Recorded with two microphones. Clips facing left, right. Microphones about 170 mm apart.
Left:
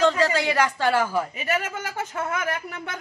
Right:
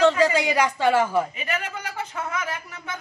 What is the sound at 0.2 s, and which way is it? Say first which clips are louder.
A woman's voice: right 1 dB; 10° right (ahead or behind).